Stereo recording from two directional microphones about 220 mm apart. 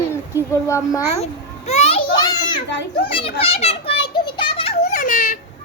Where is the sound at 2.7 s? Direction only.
50° left (ahead or behind).